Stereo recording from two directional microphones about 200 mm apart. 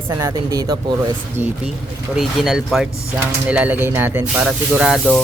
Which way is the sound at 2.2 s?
Centre (ahead or behind).